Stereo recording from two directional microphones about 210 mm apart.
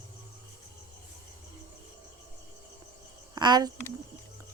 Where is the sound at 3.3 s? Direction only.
20° right (ahead or behind).